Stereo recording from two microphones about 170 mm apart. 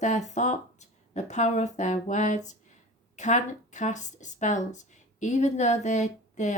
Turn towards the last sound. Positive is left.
turn(degrees=45)  # may be behind; listen again after turning